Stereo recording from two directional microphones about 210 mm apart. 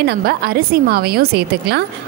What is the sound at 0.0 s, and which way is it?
A woman's voice, 50° right (ahead or behind).